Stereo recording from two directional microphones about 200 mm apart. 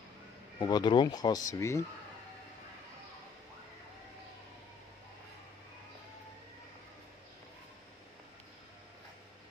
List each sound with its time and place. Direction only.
0.6 s speech: 20° left (ahead or behind)